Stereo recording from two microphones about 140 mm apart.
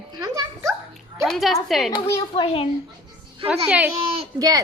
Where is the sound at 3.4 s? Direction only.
10° right (ahead or behind).